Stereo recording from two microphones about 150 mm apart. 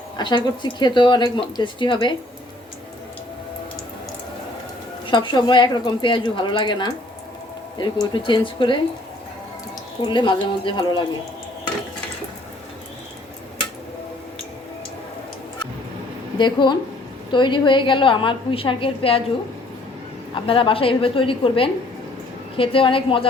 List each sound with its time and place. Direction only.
0.2 s speech: 30° left (ahead or behind)
5.0 s speech: 30° left (ahead or behind)
10.0 s speech: 30° left (ahead or behind)
16.4 s speech: 30° left (ahead or behind)
20.3 s speech: 35° left (ahead or behind)